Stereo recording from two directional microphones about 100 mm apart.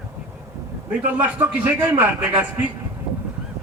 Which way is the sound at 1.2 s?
20° right (ahead or behind).